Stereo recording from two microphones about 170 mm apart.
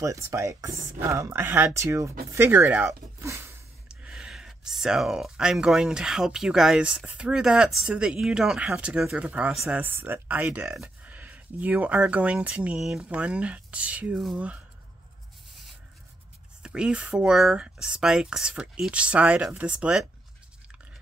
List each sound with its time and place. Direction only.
0.0 s speech: 20° right (ahead or behind)
3.9 s speech: 5° right (ahead or behind)
16.6 s speech: 5° right (ahead or behind)